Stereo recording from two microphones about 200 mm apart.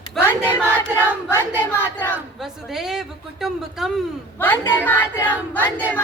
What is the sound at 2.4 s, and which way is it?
Speech, centre (ahead or behind).